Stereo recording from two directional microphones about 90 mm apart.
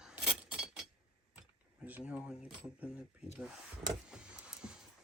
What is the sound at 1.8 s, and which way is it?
Speech, 15° right (ahead or behind).